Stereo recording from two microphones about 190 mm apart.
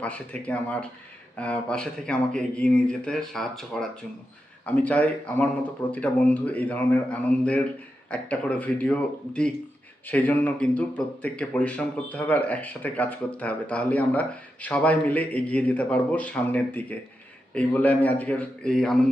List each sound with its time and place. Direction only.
0.0 s speech: 5° left (ahead or behind)